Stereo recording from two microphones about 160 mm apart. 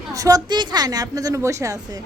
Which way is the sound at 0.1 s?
20° right (ahead or behind).